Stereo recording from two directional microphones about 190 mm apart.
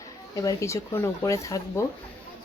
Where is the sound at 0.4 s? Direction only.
15° left (ahead or behind).